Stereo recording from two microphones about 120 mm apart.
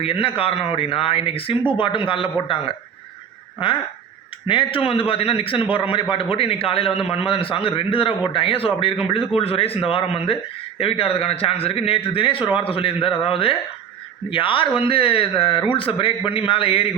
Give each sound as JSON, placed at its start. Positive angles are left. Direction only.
{"t": 0.0, "sound": "a man's voice", "side_deg": 50}
{"t": 4.4, "sound": "a man's voice", "side_deg": 45}